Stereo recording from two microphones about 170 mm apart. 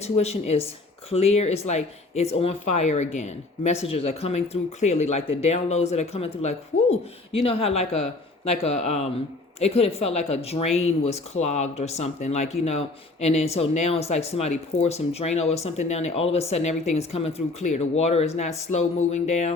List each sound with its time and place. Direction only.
0.0 s speech: 40° left (ahead or behind)